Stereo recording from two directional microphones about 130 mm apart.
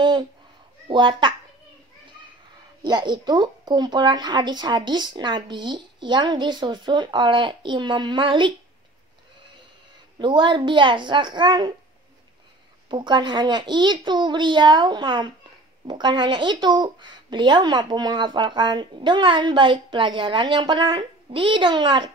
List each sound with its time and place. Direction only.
0.0 s a sound: 35° right (ahead or behind)
0.8 s a child's voice: 35° right (ahead or behind)
2.8 s speech: 35° right (ahead or behind)
10.1 s speech: 35° right (ahead or behind)
12.9 s speech: 35° right (ahead or behind)